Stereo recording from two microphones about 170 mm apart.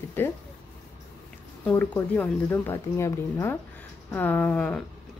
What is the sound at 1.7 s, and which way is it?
Speech, 10° left (ahead or behind).